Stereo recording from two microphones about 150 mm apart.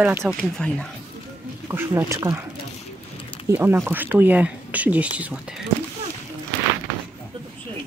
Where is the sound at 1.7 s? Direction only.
15° right (ahead or behind).